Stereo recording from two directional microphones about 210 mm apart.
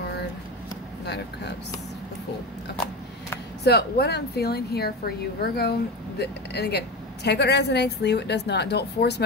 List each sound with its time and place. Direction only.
1.0 s a woman's voice: 55° left (ahead or behind)
3.6 s a woman's voice: 50° left (ahead or behind)